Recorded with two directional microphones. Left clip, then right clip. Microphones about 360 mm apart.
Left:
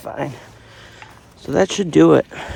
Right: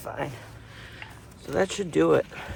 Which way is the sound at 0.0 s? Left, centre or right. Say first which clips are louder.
Left 7 dB; left.